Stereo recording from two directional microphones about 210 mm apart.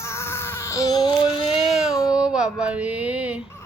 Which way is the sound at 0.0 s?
15° left (ahead or behind).